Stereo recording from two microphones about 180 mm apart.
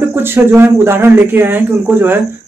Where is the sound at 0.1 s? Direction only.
10° right (ahead or behind).